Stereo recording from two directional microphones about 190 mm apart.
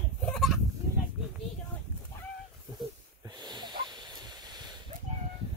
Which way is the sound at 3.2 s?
25° right (ahead or behind).